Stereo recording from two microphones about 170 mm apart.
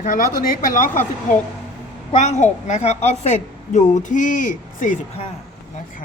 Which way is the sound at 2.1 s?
45° left (ahead or behind).